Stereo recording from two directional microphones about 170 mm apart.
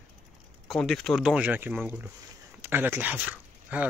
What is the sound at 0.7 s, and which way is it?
Speech, 5° left (ahead or behind).